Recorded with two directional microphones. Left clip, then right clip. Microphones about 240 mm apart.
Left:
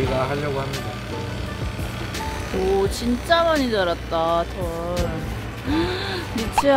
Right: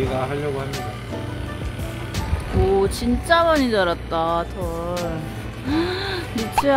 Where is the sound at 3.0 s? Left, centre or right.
Centre.